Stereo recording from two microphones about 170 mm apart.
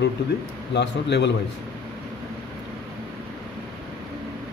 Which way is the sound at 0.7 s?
90° left.